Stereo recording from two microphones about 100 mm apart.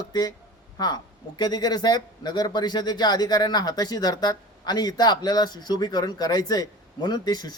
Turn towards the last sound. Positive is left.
turn(degrees=45)  # may be behind; listen again after turning